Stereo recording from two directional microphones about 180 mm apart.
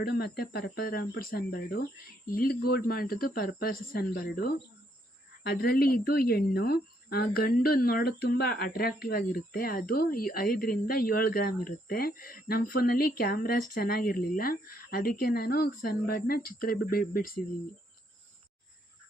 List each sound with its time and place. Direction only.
0.0 s a woman's voice: 60° left (ahead or behind)